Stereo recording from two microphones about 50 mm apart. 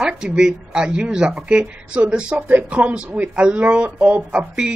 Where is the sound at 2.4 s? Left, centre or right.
Right.